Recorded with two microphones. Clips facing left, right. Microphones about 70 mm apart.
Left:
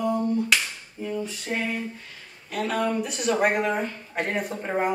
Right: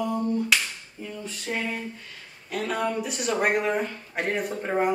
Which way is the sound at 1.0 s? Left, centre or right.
Centre.